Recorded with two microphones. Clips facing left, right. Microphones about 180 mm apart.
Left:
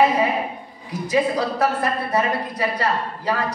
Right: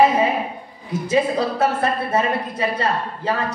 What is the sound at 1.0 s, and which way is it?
Speech, 25° right (ahead or behind).